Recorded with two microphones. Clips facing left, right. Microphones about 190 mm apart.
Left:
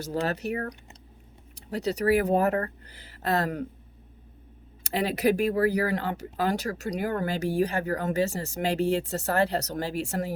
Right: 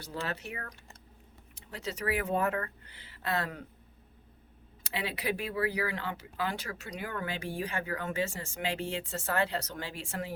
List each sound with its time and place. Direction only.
0.0 s speech: 40° left (ahead or behind)
4.8 s speech: 40° left (ahead or behind)